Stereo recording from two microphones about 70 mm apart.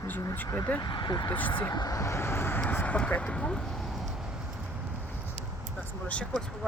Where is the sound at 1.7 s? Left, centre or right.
Left.